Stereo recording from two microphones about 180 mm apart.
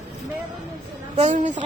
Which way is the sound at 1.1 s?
40° right (ahead or behind).